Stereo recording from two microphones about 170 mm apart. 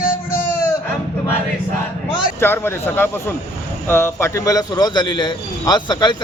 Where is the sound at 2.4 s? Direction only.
15° left (ahead or behind).